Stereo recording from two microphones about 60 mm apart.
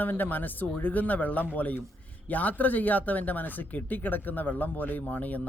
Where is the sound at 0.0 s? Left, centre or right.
Left.